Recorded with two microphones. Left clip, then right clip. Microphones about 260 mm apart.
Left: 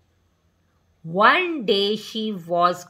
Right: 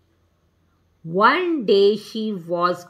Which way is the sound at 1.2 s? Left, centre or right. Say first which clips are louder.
Even; left.